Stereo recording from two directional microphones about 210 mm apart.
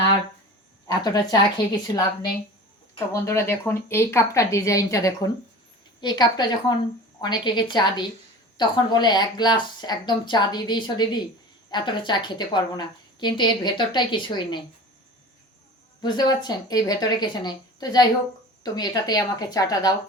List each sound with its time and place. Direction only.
0.9 s a woman's voice: 20° left (ahead or behind)
2.9 s a woman's voice: 15° left (ahead or behind)
16.0 s a woman's voice: 20° left (ahead or behind)